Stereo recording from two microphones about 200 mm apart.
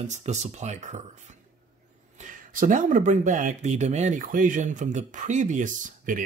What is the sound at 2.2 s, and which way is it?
Speech, 40° right (ahead or behind).